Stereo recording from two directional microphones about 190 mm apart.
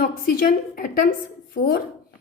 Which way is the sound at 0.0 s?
50° left (ahead or behind).